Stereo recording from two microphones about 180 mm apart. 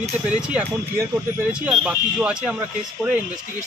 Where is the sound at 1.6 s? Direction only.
5° right (ahead or behind).